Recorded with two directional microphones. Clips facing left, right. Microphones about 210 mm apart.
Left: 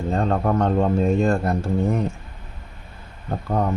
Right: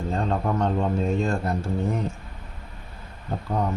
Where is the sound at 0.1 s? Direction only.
55° left (ahead or behind).